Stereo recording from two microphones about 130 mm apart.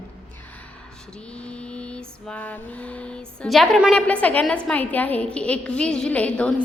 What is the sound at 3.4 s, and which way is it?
Speech, centre (ahead or behind).